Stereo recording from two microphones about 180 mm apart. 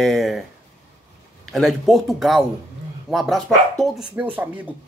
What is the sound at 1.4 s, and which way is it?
A man's voice, centre (ahead or behind).